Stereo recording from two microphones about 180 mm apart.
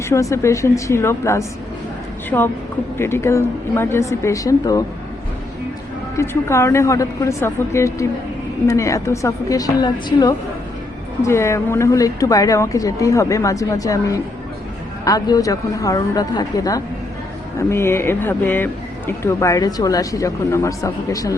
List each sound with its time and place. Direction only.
0.0 s speech: 15° left (ahead or behind)
6.1 s speech: 15° left (ahead or behind)